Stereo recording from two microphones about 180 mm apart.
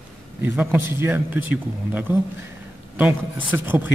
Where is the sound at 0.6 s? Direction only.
10° right (ahead or behind).